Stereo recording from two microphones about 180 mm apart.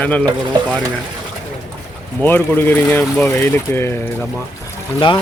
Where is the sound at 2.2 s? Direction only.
10° left (ahead or behind).